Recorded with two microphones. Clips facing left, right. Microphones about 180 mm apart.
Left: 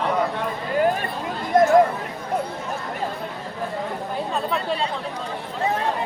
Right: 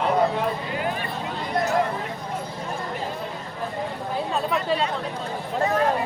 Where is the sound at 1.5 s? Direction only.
45° left (ahead or behind).